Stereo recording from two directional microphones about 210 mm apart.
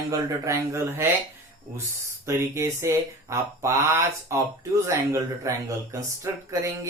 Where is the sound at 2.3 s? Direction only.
15° right (ahead or behind).